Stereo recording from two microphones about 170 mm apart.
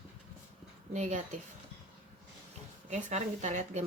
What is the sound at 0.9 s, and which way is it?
Speech, 45° right (ahead or behind).